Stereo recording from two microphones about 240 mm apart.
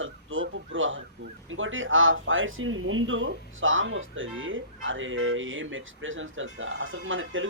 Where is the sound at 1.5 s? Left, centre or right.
Right.